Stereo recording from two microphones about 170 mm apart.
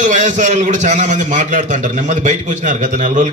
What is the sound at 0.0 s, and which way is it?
A man's voice, 45° right (ahead or behind).